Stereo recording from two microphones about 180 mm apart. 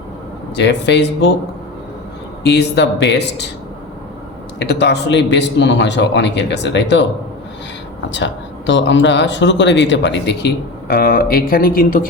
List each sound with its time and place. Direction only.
0.5 s a man's voice: 75° left (ahead or behind)
2.4 s a man's voice: 70° left (ahead or behind)
4.6 s a man's voice: 70° left (ahead or behind)
8.1 s speech: 90° left; by 12.0 s 50° left (ahead or behind)